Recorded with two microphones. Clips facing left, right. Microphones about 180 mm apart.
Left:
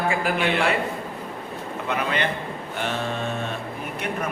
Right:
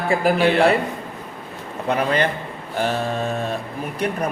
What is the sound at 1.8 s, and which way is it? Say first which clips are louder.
A man's voice: right 6 dB; 40° right (ahead or behind).